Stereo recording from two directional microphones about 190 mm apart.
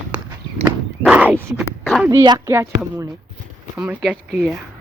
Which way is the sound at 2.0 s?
20° right (ahead or behind).